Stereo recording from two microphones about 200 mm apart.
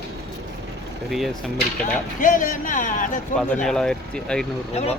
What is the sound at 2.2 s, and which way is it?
Speech, 40° left (ahead or behind).